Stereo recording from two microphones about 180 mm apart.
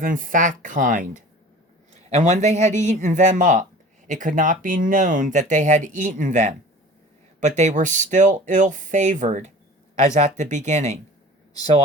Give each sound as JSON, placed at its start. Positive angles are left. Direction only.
{"t": 0.0, "sound": "speech", "side_deg": -50}